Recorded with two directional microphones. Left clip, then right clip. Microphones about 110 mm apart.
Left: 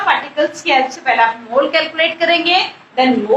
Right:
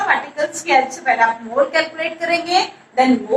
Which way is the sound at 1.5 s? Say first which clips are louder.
Left 5 dB; 10° left (ahead or behind).